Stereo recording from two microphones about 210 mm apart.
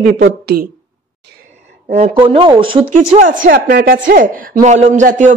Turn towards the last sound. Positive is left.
turn(degrees=-35)  # may be behind; listen again after turning